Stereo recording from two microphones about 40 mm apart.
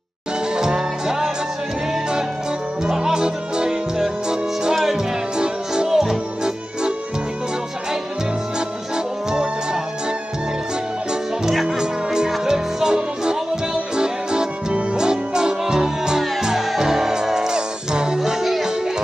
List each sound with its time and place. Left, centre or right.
0.6 s music: centre
2.9 s music: centre
4.9 s music: right
8.5 s music: centre
11.6 s music: centre